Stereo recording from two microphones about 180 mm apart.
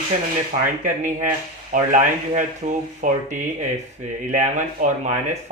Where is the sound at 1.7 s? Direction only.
45° right (ahead or behind).